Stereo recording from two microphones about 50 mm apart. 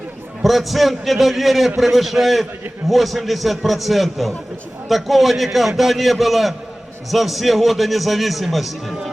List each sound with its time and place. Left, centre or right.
0.4 s a man's voice: centre